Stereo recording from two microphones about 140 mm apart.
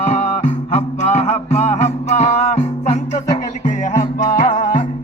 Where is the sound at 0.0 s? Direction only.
55° left (ahead or behind).